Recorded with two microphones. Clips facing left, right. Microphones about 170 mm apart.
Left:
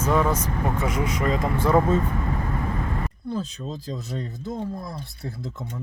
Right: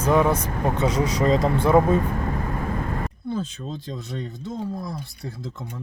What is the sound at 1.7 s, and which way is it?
Speech, 15° right (ahead or behind).